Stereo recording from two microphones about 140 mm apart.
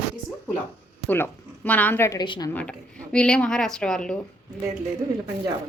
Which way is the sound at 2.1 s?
30° left (ahead or behind).